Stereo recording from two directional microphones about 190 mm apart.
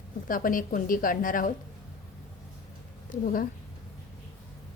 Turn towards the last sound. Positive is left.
turn(degrees=45)  # may be behind; listen again after turning